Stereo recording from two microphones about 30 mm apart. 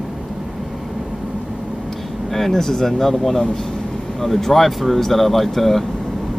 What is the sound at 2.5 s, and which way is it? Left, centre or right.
Speech, centre.